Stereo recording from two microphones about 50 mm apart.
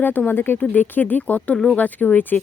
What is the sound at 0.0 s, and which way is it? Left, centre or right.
Speech, left.